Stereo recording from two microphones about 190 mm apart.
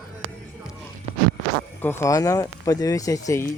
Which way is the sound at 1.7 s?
10° left (ahead or behind).